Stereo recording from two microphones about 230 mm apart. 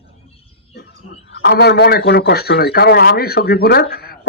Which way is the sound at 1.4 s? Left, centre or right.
Left.